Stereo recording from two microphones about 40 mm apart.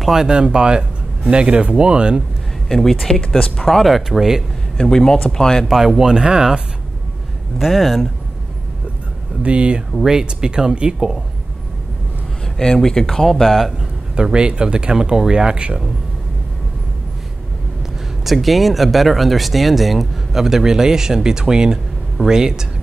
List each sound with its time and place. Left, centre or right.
0.0 s speech: centre
2.7 s speech: centre
3.3 s speech: left
3.6 s speech: centre
4.8 s speech: centre
5.7 s speech: centre
7.5 s speech: centre
9.4 s speech: right
10.0 s speech: centre
12.8 s speech: centre
13.5 s speech: centre
14.1 s speech: right
18.2 s speech: centre